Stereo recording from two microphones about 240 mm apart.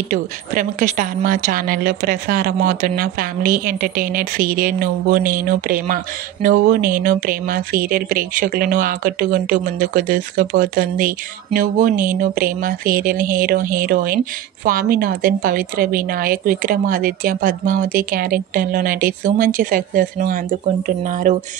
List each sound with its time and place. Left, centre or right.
0.1 s speech: right